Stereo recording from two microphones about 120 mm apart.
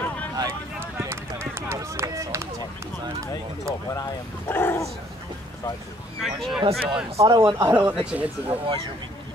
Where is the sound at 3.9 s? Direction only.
30° left (ahead or behind).